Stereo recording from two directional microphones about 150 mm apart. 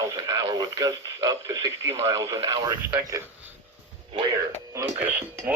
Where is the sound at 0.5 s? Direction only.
25° right (ahead or behind).